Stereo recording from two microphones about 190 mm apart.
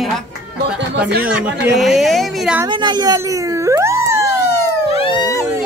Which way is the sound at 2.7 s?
25° right (ahead or behind).